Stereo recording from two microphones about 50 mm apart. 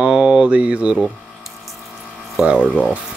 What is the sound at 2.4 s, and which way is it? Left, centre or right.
Speech, right.